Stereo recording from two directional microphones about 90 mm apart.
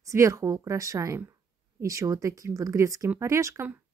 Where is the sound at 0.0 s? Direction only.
35° right (ahead or behind).